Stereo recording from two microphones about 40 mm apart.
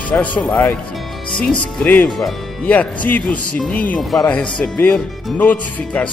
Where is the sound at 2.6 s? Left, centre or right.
Left.